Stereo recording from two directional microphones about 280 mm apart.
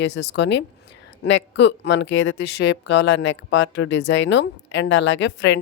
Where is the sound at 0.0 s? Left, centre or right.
Left.